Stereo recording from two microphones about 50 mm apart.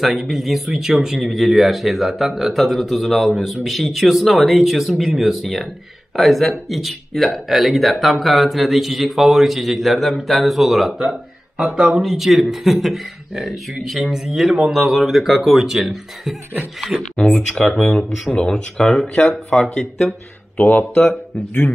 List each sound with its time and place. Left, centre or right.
0.0 s speech: centre
11.5 s speech: centre
12.0 s speech: centre
17.0 s speech: centre